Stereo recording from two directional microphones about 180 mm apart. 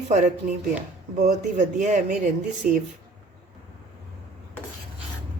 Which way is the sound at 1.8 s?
45° right (ahead or behind).